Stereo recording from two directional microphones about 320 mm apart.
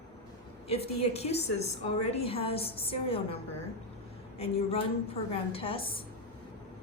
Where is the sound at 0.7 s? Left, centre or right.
Centre.